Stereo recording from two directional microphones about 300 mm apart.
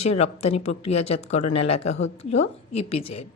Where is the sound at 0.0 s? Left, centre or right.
Left.